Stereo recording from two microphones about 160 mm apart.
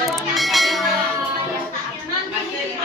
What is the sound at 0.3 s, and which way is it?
Bell, centre (ahead or behind).